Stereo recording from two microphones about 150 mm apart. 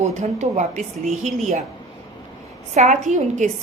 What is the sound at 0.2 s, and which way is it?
A woman's voice, 50° right (ahead or behind).